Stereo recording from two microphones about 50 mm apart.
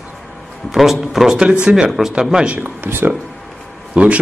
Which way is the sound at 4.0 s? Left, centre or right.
Right.